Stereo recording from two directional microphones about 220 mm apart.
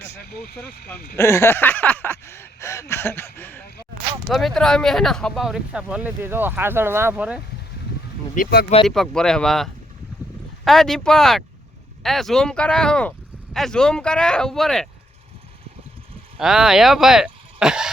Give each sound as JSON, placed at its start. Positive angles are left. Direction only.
{"t": 0.3, "sound": "speech", "side_deg": 45}
{"t": 1.1, "sound": "a sound", "side_deg": 10}
{"t": 4.3, "sound": "speech", "side_deg": 0}
{"t": 8.4, "sound": "speech", "side_deg": 45}
{"t": 8.9, "sound": "speech", "side_deg": 0}
{"t": 16.4, "sound": "speech", "side_deg": 0}